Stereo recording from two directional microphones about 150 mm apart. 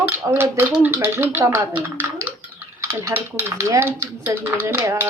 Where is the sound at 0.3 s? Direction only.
15° right (ahead or behind).